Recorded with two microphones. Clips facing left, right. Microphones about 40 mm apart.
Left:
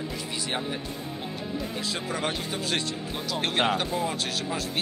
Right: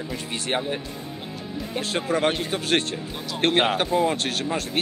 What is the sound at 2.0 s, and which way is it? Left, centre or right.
Speech, right.